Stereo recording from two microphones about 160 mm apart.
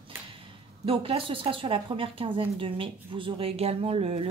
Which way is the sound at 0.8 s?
35° right (ahead or behind).